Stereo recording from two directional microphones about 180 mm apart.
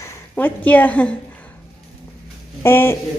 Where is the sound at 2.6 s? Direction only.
15° left (ahead or behind).